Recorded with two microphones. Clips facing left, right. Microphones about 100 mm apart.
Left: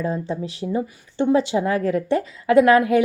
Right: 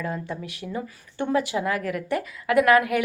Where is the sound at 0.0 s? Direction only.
25° left (ahead or behind).